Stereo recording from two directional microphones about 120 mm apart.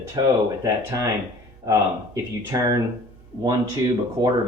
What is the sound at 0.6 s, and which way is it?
Speech, 25° right (ahead or behind).